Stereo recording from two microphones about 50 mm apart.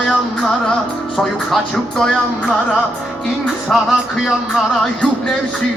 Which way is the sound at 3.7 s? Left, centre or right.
Centre.